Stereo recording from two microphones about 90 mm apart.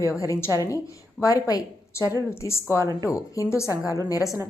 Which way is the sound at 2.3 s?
30° left (ahead or behind).